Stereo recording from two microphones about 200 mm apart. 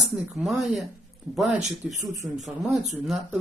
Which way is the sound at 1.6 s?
35° right (ahead or behind).